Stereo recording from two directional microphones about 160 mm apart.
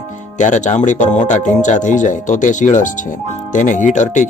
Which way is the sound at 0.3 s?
50° left (ahead or behind).